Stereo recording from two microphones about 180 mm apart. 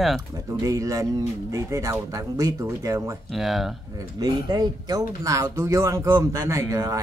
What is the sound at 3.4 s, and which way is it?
Speech, centre (ahead or behind).